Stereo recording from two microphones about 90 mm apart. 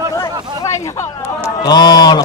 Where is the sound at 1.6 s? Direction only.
50° left (ahead or behind).